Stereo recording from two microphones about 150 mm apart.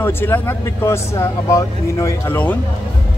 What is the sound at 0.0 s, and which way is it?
Speech, 15° left (ahead or behind).